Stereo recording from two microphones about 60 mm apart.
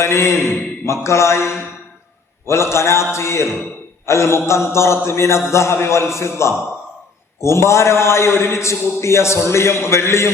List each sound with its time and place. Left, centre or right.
0.0 s a man's voice: left